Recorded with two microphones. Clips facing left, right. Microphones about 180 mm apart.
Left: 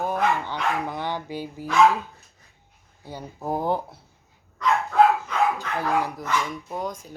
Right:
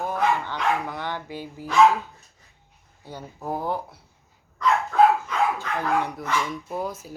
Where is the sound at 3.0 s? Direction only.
15° left (ahead or behind).